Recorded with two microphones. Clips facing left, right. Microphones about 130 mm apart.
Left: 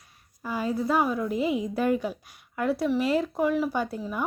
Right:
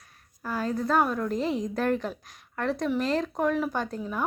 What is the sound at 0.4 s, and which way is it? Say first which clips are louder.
A woman's voice: left 1 dB; 5° left (ahead or behind).